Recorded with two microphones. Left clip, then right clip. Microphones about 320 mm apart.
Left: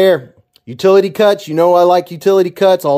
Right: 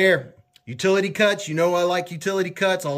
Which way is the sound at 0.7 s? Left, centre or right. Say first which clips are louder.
Left 11 dB; centre.